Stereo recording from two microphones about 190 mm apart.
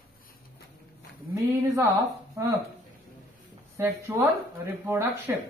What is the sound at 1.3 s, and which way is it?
A woman's voice, 15° right (ahead or behind).